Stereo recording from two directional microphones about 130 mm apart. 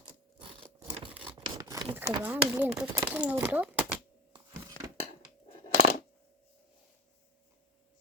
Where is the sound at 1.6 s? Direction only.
30° right (ahead or behind).